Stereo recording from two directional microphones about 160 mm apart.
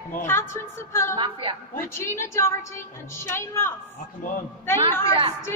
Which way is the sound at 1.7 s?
15° left (ahead or behind).